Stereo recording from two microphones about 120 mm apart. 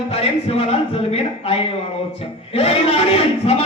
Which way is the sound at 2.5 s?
55° left (ahead or behind).